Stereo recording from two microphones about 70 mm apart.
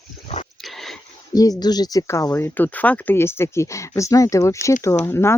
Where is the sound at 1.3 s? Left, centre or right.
Left.